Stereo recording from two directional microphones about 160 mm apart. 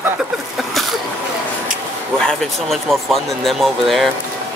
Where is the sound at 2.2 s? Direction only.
5° left (ahead or behind).